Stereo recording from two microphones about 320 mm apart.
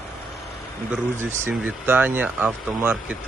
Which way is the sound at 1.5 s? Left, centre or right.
Centre.